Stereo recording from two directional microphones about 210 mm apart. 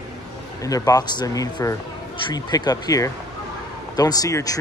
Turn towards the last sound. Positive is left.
turn(degrees=15)  # may be behind; listen again after turning